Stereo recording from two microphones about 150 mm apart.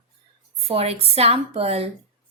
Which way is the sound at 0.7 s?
40° right (ahead or behind).